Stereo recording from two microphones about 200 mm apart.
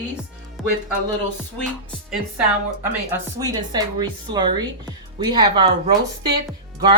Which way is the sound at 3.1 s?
20° right (ahead or behind).